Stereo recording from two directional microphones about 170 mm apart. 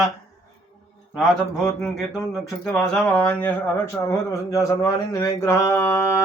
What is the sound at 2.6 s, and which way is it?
Speech, 5° left (ahead or behind).